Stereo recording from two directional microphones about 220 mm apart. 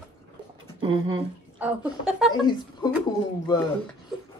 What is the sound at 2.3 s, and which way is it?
Speech, 20° left (ahead or behind).